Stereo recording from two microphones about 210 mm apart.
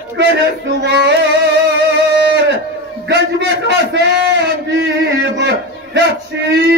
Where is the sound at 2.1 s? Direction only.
50° right (ahead or behind).